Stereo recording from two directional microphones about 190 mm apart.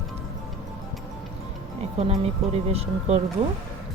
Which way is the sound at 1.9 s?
35° right (ahead or behind).